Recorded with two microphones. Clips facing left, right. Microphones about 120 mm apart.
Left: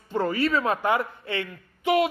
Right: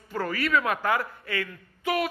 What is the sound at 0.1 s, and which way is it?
A man's voice, 25° left (ahead or behind).